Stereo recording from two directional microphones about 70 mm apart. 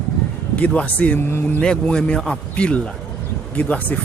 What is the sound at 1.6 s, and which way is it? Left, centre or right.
A man's voice, centre.